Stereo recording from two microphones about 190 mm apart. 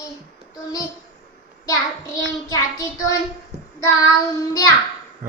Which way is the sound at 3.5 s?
60° right (ahead or behind).